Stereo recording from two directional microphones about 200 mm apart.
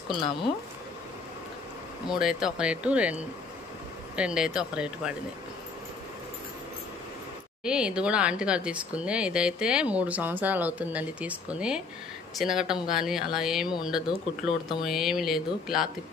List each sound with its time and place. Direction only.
0.1 s speech: 25° left (ahead or behind)
2.0 s speech: 5° right (ahead or behind)
7.6 s speech: 5° right (ahead or behind)